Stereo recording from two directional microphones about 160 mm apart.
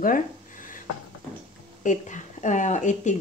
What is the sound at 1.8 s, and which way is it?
Speech, 50° left (ahead or behind).